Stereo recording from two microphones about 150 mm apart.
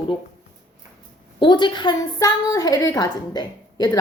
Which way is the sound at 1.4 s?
30° left (ahead or behind).